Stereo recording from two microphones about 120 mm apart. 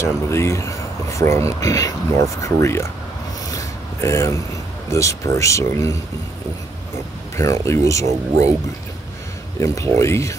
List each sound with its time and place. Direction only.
0.0 s speech: 25° left (ahead or behind)
3.5 s a sound: 25° left (ahead or behind)
4.9 s speech: 25° left (ahead or behind)
7.3 s speech: 25° left (ahead or behind)
9.9 s speech: 25° left (ahead or behind)